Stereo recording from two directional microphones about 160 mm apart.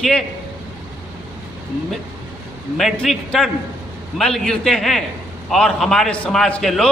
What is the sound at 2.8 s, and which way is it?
A man's voice, centre (ahead or behind).